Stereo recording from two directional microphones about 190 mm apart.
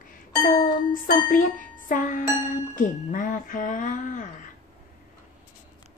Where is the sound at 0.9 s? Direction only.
45° left (ahead or behind).